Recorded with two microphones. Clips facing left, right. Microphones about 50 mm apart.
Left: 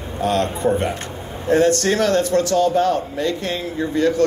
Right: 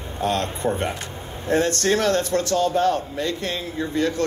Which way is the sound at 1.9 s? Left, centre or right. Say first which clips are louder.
Left 3 dB; left.